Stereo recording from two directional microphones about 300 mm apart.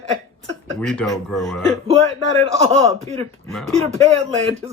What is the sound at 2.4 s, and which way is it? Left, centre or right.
Speech, right.